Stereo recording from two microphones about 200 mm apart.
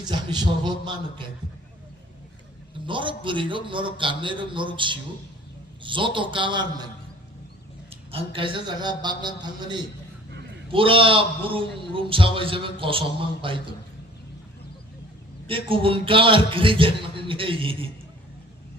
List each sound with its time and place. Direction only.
0.0 s a man's voice: 20° right (ahead or behind)
2.8 s a man's voice: 25° right (ahead or behind)
7.9 s a man's voice: 25° right (ahead or behind)
15.4 s a man's voice: 25° right (ahead or behind)